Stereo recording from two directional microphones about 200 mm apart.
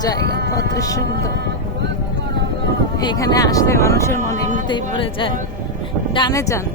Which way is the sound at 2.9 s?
20° left (ahead or behind).